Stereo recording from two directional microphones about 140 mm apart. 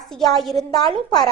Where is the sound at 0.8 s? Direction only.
30° left (ahead or behind).